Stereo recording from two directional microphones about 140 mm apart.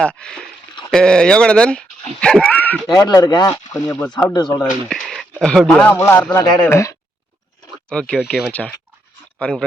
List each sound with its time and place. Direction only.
0.0 s speech: 5° left (ahead or behind)
2.8 s speech: 30° left (ahead or behind)
4.9 s a sound: centre (ahead or behind)
5.4 s speech: 5° left (ahead or behind); by 6.9 s 20° left (ahead or behind)
7.9 s speech: 5° left (ahead or behind)